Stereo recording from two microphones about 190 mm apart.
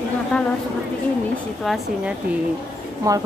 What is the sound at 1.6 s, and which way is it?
Speech, centre (ahead or behind).